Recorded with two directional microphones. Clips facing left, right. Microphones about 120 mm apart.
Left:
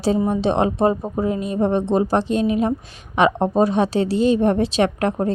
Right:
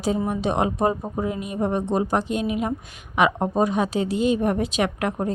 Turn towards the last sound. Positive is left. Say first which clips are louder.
# left 5 dB
turn(degrees=30)  # may be behind; listen again after turning